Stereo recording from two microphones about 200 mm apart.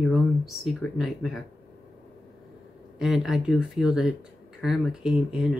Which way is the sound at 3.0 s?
Centre (ahead or behind).